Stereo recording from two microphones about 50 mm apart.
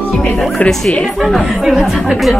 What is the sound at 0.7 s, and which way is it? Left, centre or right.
A woman's voice, centre.